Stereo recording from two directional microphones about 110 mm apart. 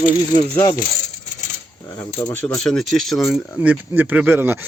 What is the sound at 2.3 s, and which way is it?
Speech, 15° left (ahead or behind).